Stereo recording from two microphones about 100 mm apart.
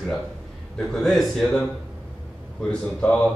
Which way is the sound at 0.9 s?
5° left (ahead or behind).